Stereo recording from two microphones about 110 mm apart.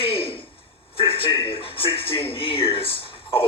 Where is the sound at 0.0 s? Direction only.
55° left (ahead or behind).